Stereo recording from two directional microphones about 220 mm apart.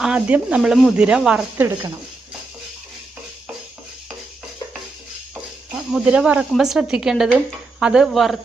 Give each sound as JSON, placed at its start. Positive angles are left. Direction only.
{"t": 0.0, "sound": "speech", "side_deg": -5}
{"t": 5.9, "sound": "speech", "side_deg": -5}